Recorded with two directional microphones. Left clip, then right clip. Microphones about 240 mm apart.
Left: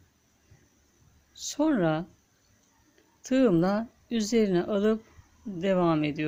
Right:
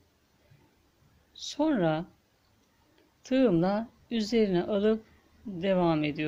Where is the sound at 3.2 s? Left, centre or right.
Centre.